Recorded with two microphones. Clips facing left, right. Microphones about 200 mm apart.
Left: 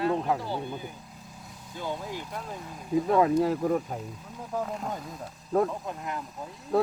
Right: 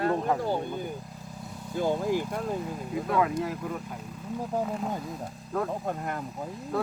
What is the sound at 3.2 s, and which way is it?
Speech, 30° left (ahead or behind).